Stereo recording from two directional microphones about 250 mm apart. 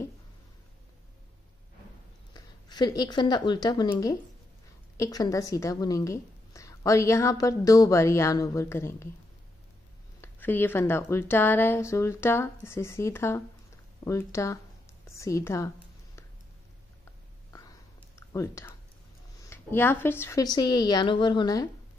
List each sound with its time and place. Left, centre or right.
2.3 s speech: centre
4.9 s a woman's voice: centre
10.2 s a woman's voice: centre
18.1 s a sound: centre
19.5 s a woman's voice: centre